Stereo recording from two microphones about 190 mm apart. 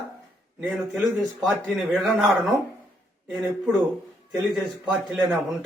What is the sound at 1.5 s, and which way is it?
Speech, centre (ahead or behind).